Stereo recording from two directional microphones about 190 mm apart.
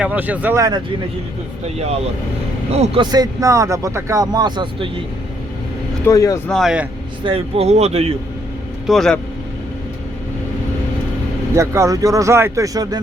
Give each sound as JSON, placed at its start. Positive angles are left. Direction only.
{"t": 0.0, "sound": "speech", "side_deg": -10}
{"t": 2.7, "sound": "speech", "side_deg": -30}
{"t": 6.1, "sound": "speech", "side_deg": 15}
{"t": 6.5, "sound": "speech", "side_deg": 0}
{"t": 7.3, "sound": "speech", "side_deg": -30}
{"t": 8.9, "sound": "speech", "side_deg": 0}
{"t": 11.5, "sound": "speech", "side_deg": -15}